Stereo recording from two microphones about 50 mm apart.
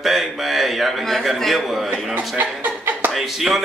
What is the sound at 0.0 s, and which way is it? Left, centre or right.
A man's voice, centre.